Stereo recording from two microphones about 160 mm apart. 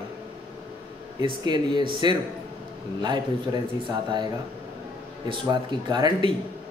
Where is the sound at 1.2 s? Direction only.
30° right (ahead or behind).